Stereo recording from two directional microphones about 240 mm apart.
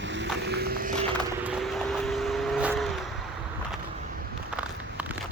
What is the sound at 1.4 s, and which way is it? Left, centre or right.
Vehicle, centre.